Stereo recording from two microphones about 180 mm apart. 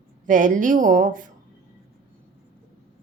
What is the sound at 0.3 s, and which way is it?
Speech, 45° right (ahead or behind).